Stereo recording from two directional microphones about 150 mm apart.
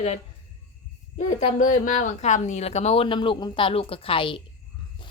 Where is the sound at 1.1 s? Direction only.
55° left (ahead or behind).